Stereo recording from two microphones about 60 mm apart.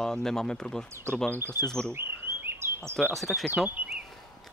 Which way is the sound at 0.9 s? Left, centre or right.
Right.